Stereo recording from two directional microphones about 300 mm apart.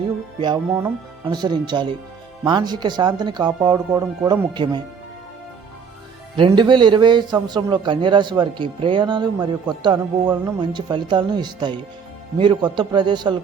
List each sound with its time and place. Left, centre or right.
0.3 s a man's voice: centre
6.3 s a man's voice: centre